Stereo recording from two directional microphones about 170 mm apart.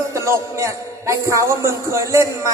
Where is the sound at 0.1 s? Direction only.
15° right (ahead or behind).